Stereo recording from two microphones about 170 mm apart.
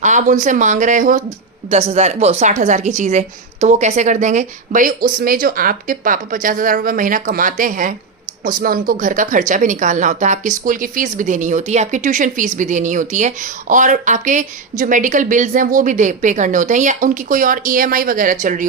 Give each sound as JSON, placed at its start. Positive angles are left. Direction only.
{"t": 0.0, "sound": "speech", "side_deg": -45}